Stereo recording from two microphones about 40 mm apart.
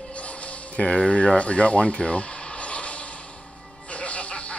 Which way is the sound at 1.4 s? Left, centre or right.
Left.